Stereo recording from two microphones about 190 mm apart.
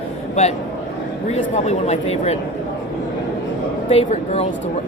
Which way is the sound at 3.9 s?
35° left (ahead or behind).